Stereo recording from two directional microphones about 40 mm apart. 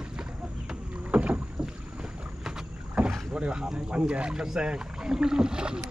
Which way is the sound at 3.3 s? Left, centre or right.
Right.